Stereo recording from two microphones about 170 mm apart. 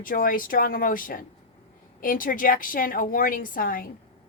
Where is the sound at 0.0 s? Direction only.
55° left (ahead or behind).